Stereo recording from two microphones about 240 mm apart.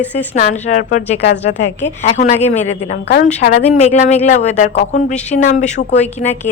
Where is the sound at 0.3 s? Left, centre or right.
Left.